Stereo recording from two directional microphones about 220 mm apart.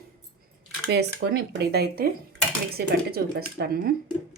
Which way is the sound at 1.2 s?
45° right (ahead or behind).